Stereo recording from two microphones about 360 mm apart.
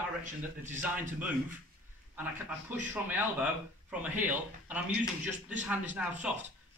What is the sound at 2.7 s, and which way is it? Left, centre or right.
A man's voice, centre.